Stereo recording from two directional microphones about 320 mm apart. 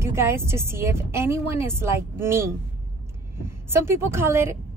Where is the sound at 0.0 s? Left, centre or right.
Centre.